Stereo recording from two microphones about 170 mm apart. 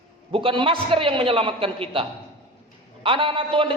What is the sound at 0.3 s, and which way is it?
A man's voice, 30° right (ahead or behind).